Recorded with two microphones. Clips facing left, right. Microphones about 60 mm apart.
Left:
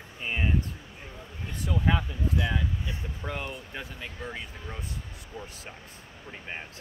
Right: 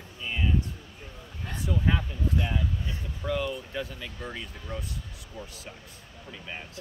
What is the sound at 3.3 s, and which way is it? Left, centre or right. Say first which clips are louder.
Speech: right 6 dB; left.